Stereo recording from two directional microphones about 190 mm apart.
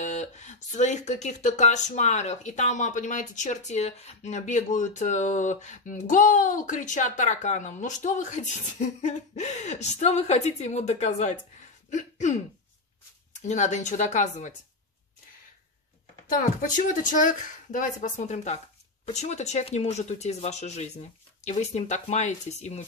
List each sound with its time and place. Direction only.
0.0 s speech: 40° left (ahead or behind)
11.9 s throat clearing: 40° left (ahead or behind)
13.5 s speech: 40° left (ahead or behind)
16.3 s speech: 45° left (ahead or behind)